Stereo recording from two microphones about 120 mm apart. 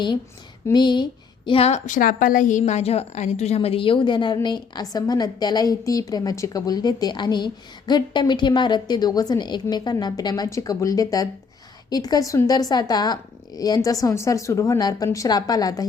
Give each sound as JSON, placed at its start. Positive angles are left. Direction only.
{"t": 0.7, "sound": "a woman's voice", "side_deg": 40}
{"t": 1.5, "sound": "a woman's voice", "side_deg": 55}